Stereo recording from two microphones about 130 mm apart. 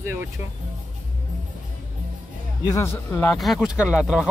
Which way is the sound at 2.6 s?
25° left (ahead or behind).